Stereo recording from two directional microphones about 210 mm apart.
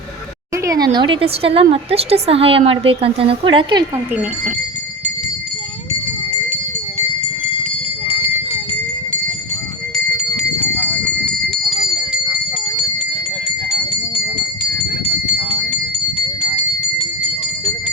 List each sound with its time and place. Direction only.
0.5 s speech: 15° right (ahead or behind)
10.6 s horse: 10° left (ahead or behind)
11.6 s a sound: centre (ahead or behind)